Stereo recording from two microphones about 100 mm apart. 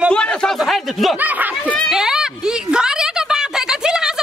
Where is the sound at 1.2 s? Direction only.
15° right (ahead or behind).